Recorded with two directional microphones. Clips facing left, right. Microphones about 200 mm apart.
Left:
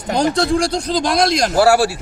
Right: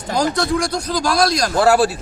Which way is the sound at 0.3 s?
30° left (ahead or behind).